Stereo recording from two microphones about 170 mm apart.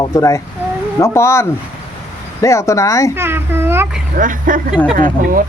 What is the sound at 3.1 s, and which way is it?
Speech, 15° right (ahead or behind).